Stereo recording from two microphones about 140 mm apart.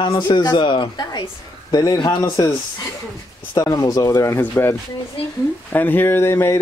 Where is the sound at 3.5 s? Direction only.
25° left (ahead or behind).